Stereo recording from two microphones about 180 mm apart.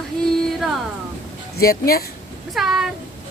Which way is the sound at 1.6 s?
55° left (ahead or behind).